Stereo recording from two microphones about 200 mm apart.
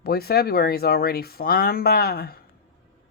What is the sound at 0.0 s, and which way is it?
Speech, 50° left (ahead or behind).